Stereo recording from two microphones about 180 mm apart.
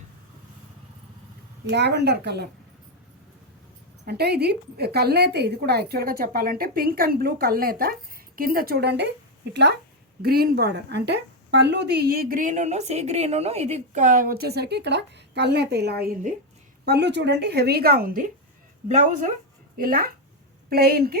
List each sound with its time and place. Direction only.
1.7 s speech: 70° right (ahead or behind)
4.0 s a woman's voice: 60° right (ahead or behind)
10.2 s a woman's voice: 60° right (ahead or behind)
16.8 s a woman's voice: 70° right (ahead or behind); by 19.3 s 45° right (ahead or behind)
19.7 s a woman's voice: 55° right (ahead or behind)